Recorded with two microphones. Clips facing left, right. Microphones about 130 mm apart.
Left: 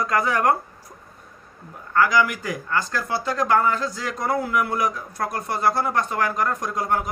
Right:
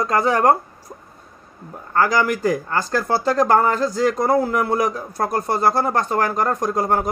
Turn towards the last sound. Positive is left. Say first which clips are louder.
# right 5 dB
turn(degrees=-35)  # may be behind; listen again after turning